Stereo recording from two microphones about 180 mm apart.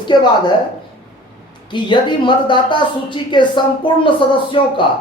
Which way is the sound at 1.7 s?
25° left (ahead or behind).